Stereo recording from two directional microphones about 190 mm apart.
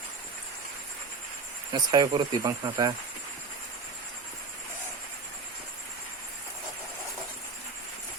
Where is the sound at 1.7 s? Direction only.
20° right (ahead or behind).